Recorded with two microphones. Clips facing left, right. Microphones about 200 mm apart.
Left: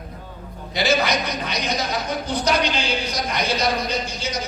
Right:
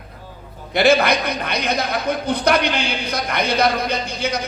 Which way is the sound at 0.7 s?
55° right (ahead or behind).